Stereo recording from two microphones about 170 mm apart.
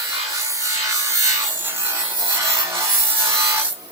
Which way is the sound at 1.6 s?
15° right (ahead or behind).